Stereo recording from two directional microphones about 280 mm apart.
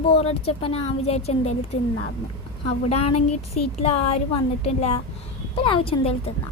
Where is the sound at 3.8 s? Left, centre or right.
Left.